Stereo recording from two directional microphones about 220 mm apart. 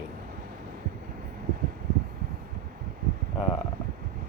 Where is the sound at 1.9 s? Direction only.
45° right (ahead or behind).